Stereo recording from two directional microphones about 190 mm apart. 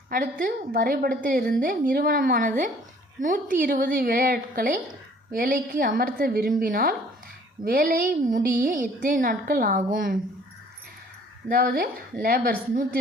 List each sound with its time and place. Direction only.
0.1 s a woman's voice: 45° right (ahead or behind)
11.4 s a woman's voice: 50° right (ahead or behind)